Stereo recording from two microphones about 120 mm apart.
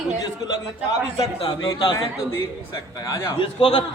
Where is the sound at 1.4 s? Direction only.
45° left (ahead or behind).